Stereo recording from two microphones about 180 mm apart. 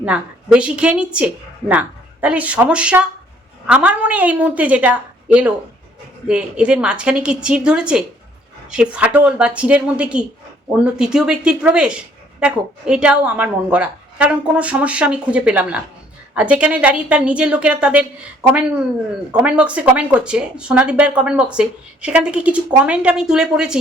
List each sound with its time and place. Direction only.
0.0 s speech: 5° right (ahead or behind)
19.3 s speech: 5° right (ahead or behind)